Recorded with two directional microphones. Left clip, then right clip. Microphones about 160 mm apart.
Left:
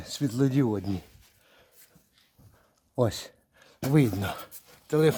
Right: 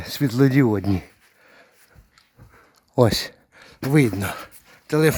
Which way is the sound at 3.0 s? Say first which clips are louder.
Right 9 dB; 30° right (ahead or behind).